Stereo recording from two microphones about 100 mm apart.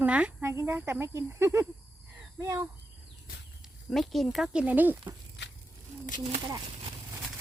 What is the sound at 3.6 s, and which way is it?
Speech, centre (ahead or behind).